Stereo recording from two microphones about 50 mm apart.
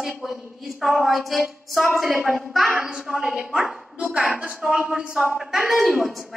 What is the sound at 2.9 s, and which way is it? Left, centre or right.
A woman's voice, centre.